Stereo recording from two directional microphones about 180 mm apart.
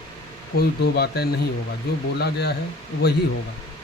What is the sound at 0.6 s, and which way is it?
Speech, 60° left (ahead or behind).